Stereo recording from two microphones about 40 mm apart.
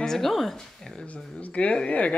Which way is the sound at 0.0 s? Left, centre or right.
Centre.